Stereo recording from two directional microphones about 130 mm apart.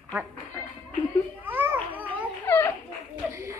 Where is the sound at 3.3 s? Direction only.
20° right (ahead or behind).